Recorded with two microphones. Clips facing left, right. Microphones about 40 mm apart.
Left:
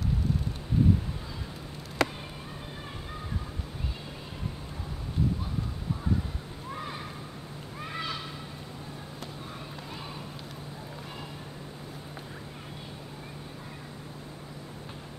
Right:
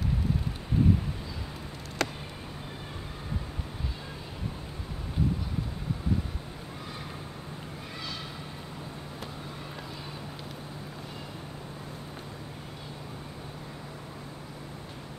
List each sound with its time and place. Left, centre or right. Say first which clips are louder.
2.0 s chop: left 3 dB; centre
7.9 s horse: left 5 dB; left